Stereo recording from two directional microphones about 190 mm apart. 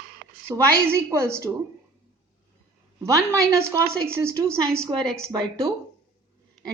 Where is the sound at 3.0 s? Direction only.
15° right (ahead or behind).